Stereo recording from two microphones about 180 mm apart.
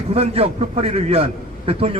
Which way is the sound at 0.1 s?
35° right (ahead or behind).